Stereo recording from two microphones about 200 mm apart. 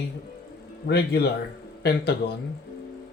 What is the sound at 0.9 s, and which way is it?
Speech, 55° left (ahead or behind).